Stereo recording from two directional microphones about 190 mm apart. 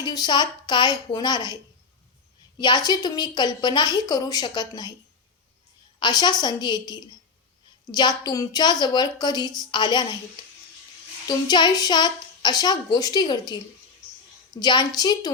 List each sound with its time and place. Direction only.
0.0 s a woman's voice: 20° left (ahead or behind)
2.6 s a woman's voice: 20° left (ahead or behind)
6.0 s a woman's voice: 20° left (ahead or behind)
11.3 s a woman's voice: 20° left (ahead or behind)
14.6 s a woman's voice: 20° left (ahead or behind)